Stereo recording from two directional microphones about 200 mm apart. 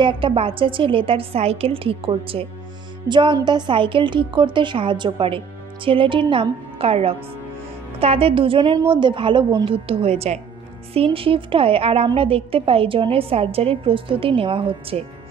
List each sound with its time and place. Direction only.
0.0 s a woman's voice: 25° right (ahead or behind)